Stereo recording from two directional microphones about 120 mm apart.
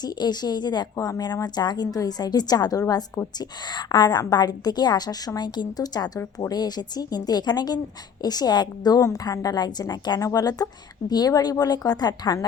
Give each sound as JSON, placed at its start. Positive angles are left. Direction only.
{"t": 0.0, "sound": "a woman's voice", "side_deg": 35}